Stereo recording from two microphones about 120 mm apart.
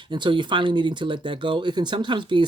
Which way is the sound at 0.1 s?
40° right (ahead or behind).